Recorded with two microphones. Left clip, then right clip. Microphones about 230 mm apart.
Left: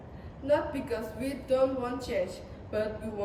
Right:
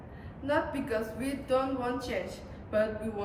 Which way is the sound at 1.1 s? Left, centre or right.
Centre.